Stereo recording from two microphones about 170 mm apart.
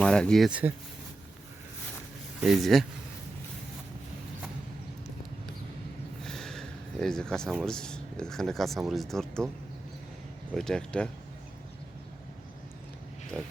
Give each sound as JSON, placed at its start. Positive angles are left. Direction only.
{"t": 0.0, "sound": "speech", "side_deg": 5}
{"t": 2.4, "sound": "speech", "side_deg": 0}
{"t": 6.2, "sound": "speech", "side_deg": 5}
{"t": 10.5, "sound": "speech", "side_deg": 5}
{"t": 13.3, "sound": "speech", "side_deg": 5}